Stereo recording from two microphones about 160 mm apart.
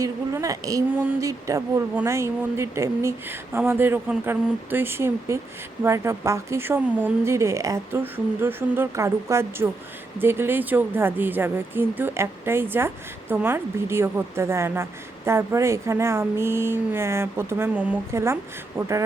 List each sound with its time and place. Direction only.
0.0 s speech: 20° right (ahead or behind)